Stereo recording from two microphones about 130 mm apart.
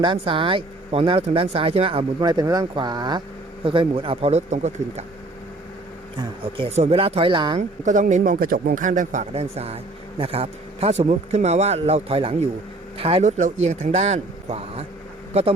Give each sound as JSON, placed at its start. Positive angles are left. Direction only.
{"t": 0.0, "sound": "speech", "side_deg": -40}
{"t": 2.2, "sound": "speech", "side_deg": -30}
{"t": 6.1, "sound": "speech", "side_deg": -40}
{"t": 6.7, "sound": "speech", "side_deg": -60}
{"t": 7.9, "sound": "speech", "side_deg": -75}